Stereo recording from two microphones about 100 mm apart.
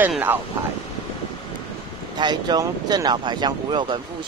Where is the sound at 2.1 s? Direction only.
45° right (ahead or behind).